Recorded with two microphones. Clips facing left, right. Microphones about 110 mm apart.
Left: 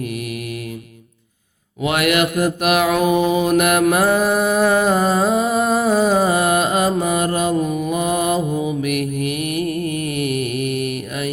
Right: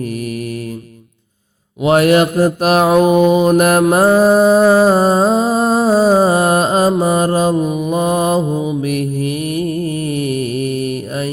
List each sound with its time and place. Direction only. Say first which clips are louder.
1.8 s mantra: right 7 dB; 35° right (ahead or behind)